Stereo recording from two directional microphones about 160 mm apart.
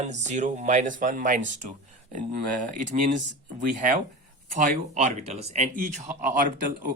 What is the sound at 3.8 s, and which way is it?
Speech, 60° right (ahead or behind).